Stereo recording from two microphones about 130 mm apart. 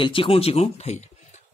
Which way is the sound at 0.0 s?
45° left (ahead or behind).